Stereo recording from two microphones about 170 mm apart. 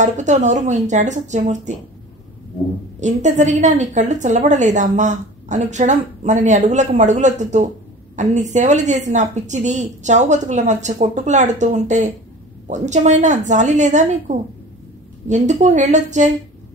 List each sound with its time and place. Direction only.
0.0 s a woman's voice: 45° right (ahead or behind)
3.0 s a woman's voice: 45° right (ahead or behind)